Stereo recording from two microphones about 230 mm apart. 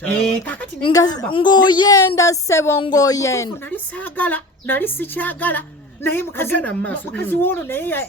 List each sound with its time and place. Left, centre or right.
0.0 s speech: centre
0.9 s a woman's voice: centre